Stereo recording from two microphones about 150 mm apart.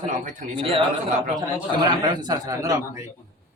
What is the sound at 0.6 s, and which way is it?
Speech, 35° right (ahead or behind).